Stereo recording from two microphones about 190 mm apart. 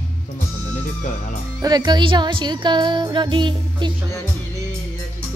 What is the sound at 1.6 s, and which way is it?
Music, 20° right (ahead or behind).